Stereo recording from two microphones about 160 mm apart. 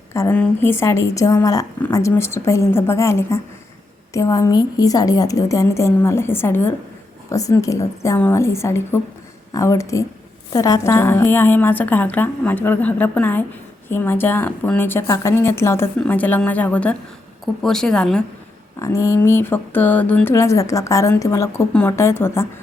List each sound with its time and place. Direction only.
0.1 s a woman's voice: 15° left (ahead or behind)
18.8 s speech: 20° left (ahead or behind)